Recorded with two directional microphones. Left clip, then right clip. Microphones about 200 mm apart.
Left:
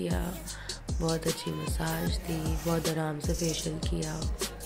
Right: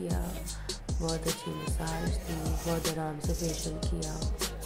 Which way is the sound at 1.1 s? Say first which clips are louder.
Left 2 dB; centre (ahead or behind).